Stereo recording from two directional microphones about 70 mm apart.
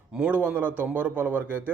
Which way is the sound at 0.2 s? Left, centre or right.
Right.